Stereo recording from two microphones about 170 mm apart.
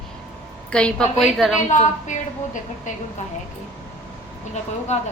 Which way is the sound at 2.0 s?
50° left (ahead or behind).